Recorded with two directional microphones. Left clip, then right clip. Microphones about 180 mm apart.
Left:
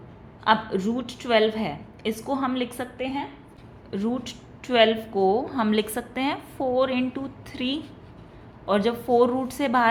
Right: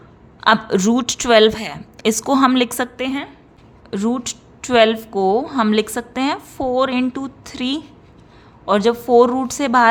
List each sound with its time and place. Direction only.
0.4 s a woman's voice: 55° right (ahead or behind)
3.8 s a woman's voice: 40° right (ahead or behind)